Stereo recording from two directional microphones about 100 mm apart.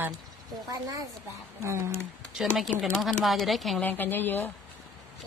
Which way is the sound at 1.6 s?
30° right (ahead or behind).